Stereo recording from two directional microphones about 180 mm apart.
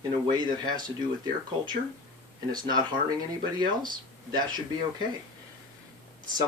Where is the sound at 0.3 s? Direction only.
25° right (ahead or behind).